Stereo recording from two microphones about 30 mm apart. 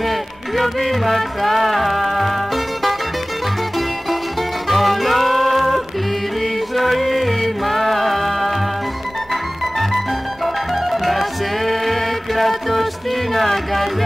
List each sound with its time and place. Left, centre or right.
0.6 s music: centre
4.6 s music: centre
6.8 s music: centre
9.8 s music: centre